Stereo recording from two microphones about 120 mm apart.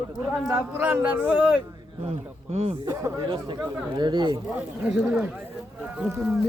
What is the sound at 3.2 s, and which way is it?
Speech, 40° right (ahead or behind).